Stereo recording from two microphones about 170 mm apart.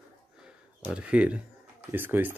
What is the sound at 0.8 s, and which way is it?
Speech, 5° right (ahead or behind).